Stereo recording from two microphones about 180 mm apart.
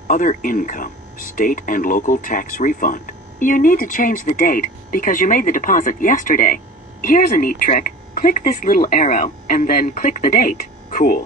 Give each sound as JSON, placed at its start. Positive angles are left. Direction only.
{"t": 0.1, "sound": "speech", "side_deg": 50}